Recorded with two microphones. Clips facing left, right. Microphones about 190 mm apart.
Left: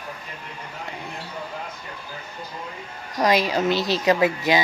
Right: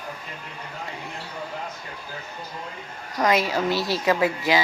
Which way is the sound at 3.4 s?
20° left (ahead or behind).